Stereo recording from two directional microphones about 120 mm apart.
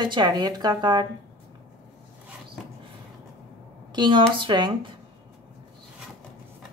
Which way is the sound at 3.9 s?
40° right (ahead or behind).